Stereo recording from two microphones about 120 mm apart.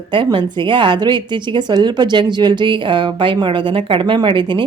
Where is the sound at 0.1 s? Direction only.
40° right (ahead or behind).